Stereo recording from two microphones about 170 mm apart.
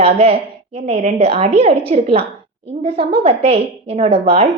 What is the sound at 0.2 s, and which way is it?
A woman's voice, 35° right (ahead or behind).